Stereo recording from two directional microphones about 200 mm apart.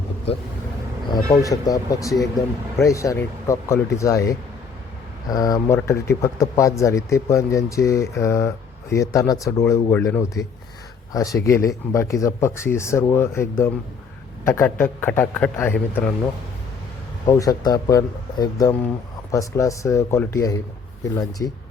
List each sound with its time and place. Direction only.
1.5 s speech: 15° left (ahead or behind)
17.2 s speech: 15° left (ahead or behind)